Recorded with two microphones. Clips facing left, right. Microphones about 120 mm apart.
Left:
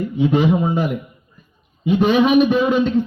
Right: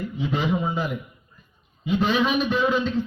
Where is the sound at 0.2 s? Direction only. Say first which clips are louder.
Left 9 dB; 55° left (ahead or behind).